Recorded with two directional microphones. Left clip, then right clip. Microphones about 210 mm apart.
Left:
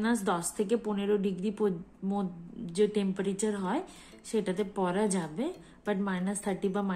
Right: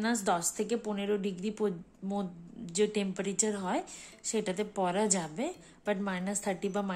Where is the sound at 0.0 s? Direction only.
15° right (ahead or behind).